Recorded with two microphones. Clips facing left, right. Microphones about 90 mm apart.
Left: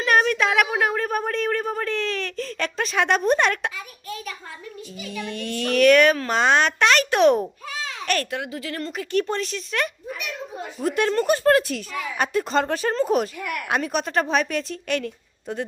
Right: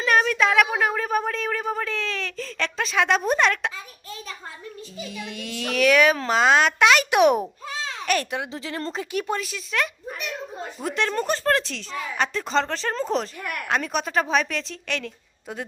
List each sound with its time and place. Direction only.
0.0 s a sound: centre (ahead or behind)
0.8 s speech: centre (ahead or behind)
5.1 s a woman's voice: 5° right (ahead or behind)
7.7 s a sound: 30° right (ahead or behind)
8.2 s a woman's voice: 20° right (ahead or behind)
9.1 s a woman's voice: 5° right (ahead or behind)